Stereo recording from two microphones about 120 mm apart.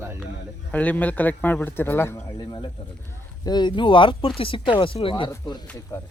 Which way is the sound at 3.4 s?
35° left (ahead or behind).